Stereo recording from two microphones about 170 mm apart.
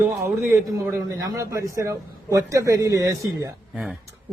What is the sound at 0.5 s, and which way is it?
A man's voice, 15° right (ahead or behind).